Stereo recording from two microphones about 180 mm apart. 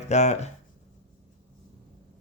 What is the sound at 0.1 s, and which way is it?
Speech, 40° left (ahead or behind).